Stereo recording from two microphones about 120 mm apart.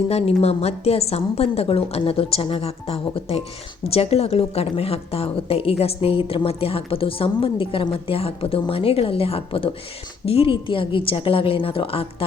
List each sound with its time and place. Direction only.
0.1 s a woman's voice: 60° left (ahead or behind)